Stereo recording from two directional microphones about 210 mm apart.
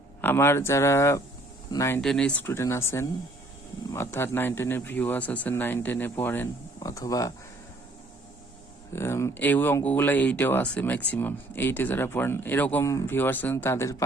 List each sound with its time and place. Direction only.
0.2 s speech: 10° left (ahead or behind)
2.0 s speech: 5° left (ahead or behind)
8.9 s speech: 10° left (ahead or behind)